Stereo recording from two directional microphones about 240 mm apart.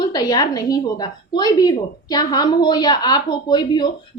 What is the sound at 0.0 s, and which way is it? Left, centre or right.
A woman's voice, centre.